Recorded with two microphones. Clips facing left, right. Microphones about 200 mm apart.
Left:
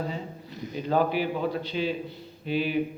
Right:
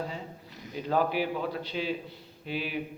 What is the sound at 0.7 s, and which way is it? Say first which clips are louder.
A man's voice: left 3 dB; 5° right (ahead or behind).